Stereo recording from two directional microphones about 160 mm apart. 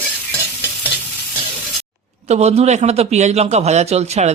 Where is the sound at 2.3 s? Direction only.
40° right (ahead or behind).